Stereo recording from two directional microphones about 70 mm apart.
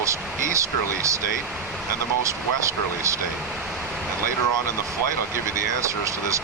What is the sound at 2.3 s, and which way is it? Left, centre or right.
Speech, right.